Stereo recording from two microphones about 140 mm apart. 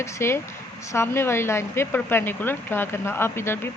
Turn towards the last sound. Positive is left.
turn(degrees=15)  # may be behind; listen again after turning